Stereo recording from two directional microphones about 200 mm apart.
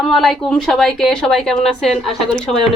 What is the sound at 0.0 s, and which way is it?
A woman's voice, centre (ahead or behind).